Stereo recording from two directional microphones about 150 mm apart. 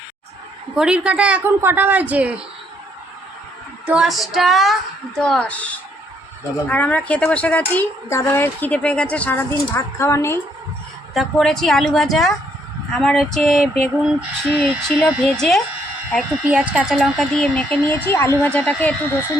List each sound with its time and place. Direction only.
0.8 s a woman's voice: 5° right (ahead or behind)
3.8 s a sound: 5° right (ahead or behind)
5.2 s speech: 5° left (ahead or behind)
6.7 s speech: 10° left (ahead or behind)
11.1 s a sound: centre (ahead or behind)
16.4 s speech: 10° right (ahead or behind); by 18.9 s 10° left (ahead or behind)